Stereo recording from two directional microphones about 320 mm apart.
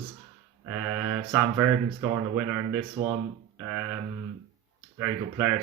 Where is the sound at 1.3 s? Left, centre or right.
Centre.